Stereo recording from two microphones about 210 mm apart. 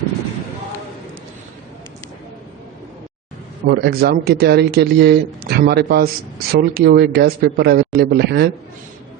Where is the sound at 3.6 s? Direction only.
45° right (ahead or behind).